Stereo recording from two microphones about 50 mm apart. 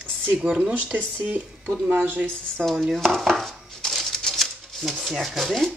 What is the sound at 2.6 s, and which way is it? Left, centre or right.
Dishes, centre.